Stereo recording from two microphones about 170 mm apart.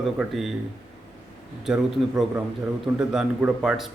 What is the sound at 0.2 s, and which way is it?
Speech, centre (ahead or behind).